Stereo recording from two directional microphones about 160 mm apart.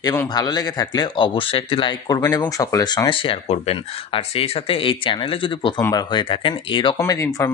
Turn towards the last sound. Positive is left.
turn(degrees=20)  # may be behind; listen again after turning